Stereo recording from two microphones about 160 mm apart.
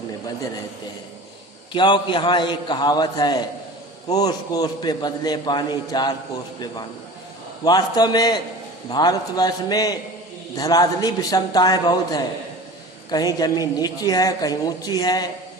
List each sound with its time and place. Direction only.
1.7 s a woman's voice: 30° left (ahead or behind)
7.6 s a woman's voice: 25° left (ahead or behind)